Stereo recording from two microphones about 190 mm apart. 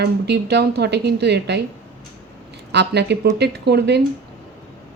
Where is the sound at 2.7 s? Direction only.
65° right (ahead or behind).